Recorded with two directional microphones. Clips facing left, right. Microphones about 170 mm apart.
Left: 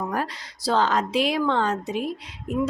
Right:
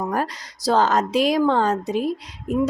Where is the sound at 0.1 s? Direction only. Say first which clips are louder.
Right 3 dB; 45° right (ahead or behind).